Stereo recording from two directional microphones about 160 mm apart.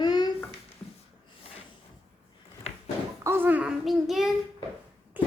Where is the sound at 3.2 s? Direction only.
15° right (ahead or behind).